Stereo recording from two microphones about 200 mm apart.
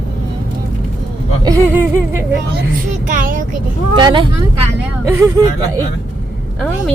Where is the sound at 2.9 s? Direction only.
40° right (ahead or behind).